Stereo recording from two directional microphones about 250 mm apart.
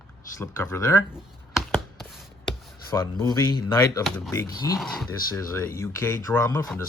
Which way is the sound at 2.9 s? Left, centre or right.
Centre.